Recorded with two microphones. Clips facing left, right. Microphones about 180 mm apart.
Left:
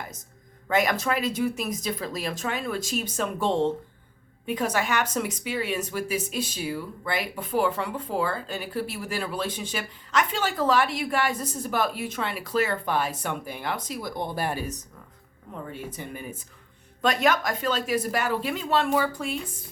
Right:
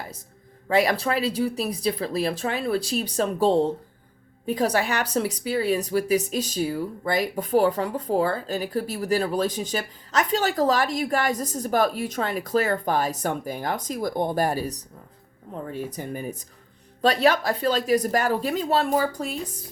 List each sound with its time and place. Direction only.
0.7 s speech: 30° right (ahead or behind)
16.0 s speech: 40° right (ahead or behind)